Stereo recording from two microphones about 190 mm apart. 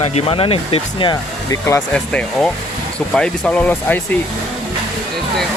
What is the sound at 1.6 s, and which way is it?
Speech, 10° left (ahead or behind).